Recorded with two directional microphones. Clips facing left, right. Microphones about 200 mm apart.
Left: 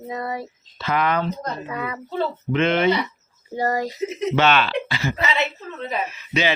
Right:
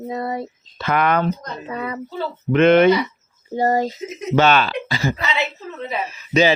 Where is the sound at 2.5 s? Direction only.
55° right (ahead or behind).